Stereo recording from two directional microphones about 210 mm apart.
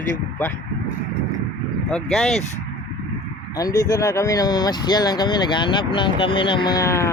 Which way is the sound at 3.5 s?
15° left (ahead or behind).